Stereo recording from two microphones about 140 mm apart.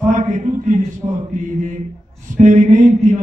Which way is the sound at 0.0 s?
60° right (ahead or behind).